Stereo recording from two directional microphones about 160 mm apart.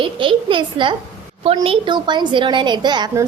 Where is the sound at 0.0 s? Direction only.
30° right (ahead or behind).